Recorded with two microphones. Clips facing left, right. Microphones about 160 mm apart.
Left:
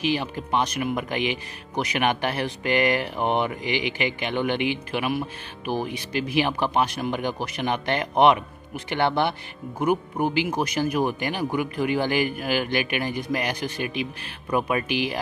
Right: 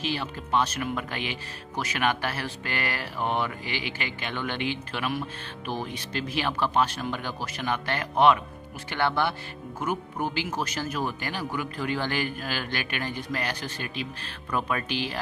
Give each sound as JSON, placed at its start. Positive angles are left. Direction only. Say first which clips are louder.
{"t": 0.0, "sound": "speech", "louder": "left 6 dB", "side_deg": 15}